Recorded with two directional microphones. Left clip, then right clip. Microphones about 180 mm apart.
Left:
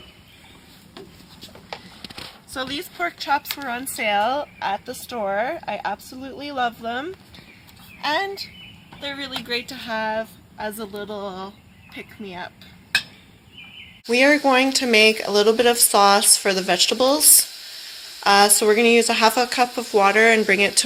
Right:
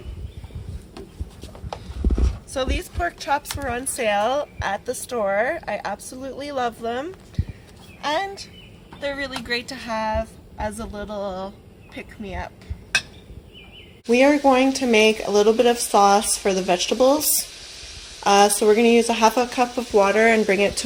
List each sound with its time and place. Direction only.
2.5 s a woman's voice: 25° right (ahead or behind)
9.0 s a woman's voice: centre (ahead or behind)
14.1 s speech: 10° right (ahead or behind)